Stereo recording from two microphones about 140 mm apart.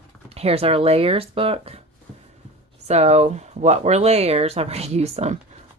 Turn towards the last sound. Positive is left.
turn(degrees=-50)  # may be behind; listen again after turning